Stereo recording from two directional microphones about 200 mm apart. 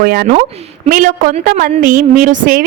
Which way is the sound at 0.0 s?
45° right (ahead or behind).